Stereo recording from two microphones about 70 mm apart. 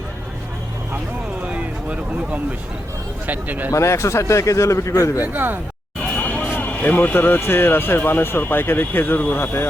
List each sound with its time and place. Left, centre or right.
1.5 s vehicle: centre
3.2 s speech: right
3.7 s a man's voice: left
5.2 s speech: right
6.1 s vehicle: left
6.6 s speech: left